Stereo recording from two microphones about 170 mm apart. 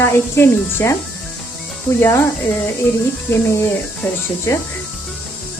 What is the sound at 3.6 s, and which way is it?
Speech, 15° left (ahead or behind).